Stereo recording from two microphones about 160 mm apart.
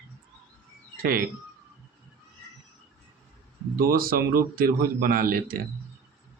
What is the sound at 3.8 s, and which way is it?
A man's voice, 65° right (ahead or behind).